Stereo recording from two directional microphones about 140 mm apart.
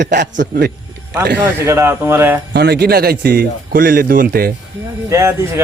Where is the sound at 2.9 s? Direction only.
90° right.